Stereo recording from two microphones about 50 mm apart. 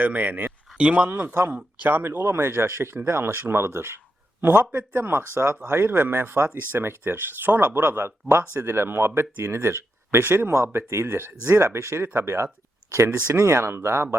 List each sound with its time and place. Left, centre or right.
0.0 s speech: right
0.8 s speech: right
1.0 s speech: right
4.7 s speech: right
4.9 s speech: right
8.5 s speech: right
10.5 s speech: right